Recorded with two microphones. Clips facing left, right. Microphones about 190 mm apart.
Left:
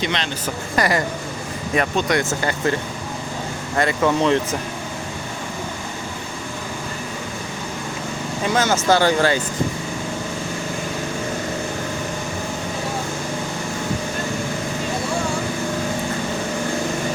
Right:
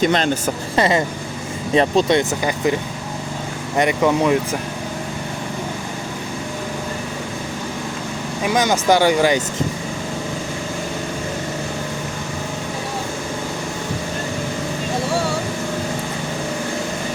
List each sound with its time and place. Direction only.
0.0 s speech: 45° right (ahead or behind)
0.8 s speech: 20° right (ahead or behind)
2.4 s speech: 15° right (ahead or behind)
3.8 s speech: 15° right (ahead or behind)
8.4 s speech: 15° right (ahead or behind)